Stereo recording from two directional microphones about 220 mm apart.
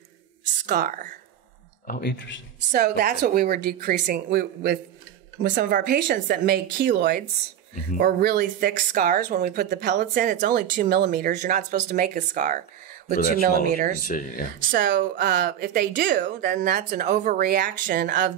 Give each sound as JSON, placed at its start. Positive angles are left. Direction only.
{"t": 0.7, "sound": "speech", "side_deg": -40}
{"t": 1.9, "sound": "speech", "side_deg": 45}
{"t": 2.7, "sound": "speech", "side_deg": -40}
{"t": 14.0, "sound": "speech", "side_deg": 40}
{"t": 14.7, "sound": "speech", "side_deg": -40}